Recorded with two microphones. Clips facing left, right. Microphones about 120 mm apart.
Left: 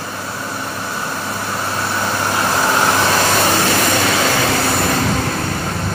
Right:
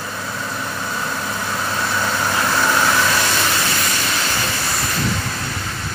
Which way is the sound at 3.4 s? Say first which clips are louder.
Left 6 dB; 80° left.